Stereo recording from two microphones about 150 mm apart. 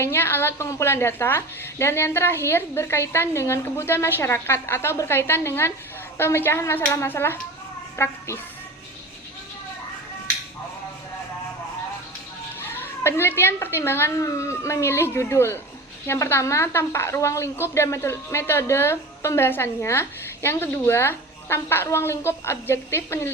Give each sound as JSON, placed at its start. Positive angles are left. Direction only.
{"t": 0.0, "sound": "a woman's voice", "side_deg": 15}
{"t": 12.5, "sound": "a woman's voice", "side_deg": 15}